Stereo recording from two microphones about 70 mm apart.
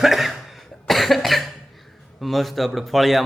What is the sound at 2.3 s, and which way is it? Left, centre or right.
Speech, centre.